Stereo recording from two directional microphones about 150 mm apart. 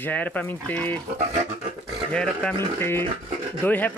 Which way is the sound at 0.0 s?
10° left (ahead or behind).